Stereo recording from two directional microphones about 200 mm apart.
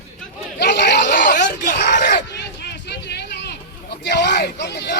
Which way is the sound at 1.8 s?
60° left (ahead or behind).